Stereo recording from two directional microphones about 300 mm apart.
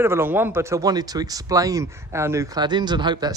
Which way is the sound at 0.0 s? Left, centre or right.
Centre.